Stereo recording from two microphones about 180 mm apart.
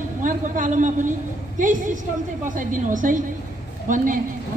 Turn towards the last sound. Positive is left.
turn(degrees=-45)  # may be behind; listen again after turning